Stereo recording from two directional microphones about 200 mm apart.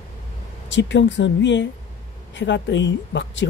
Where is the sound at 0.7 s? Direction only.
65° left (ahead or behind).